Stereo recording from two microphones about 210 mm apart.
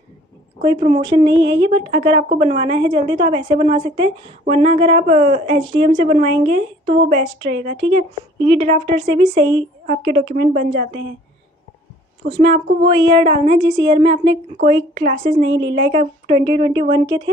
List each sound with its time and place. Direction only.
0.6 s a woman's voice: 20° right (ahead or behind)
8.4 s a woman's voice: 25° right (ahead or behind)
9.8 s a woman's voice: 40° right (ahead or behind)
12.3 s a woman's voice: 25° right (ahead or behind)